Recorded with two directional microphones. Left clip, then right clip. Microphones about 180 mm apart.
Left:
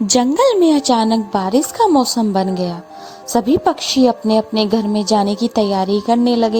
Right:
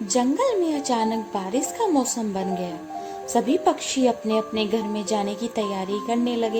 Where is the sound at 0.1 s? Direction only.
50° left (ahead or behind).